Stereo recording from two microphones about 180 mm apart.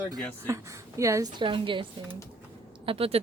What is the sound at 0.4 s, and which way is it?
Speech, 15° right (ahead or behind).